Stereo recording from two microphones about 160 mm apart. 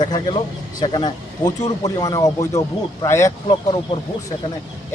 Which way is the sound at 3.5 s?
30° left (ahead or behind).